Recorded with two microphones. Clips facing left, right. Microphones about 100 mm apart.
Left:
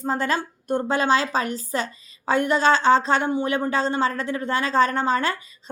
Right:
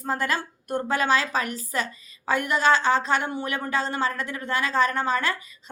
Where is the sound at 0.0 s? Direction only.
25° left (ahead or behind).